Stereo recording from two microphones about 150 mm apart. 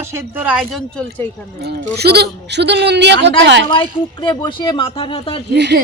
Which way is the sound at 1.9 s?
90° right.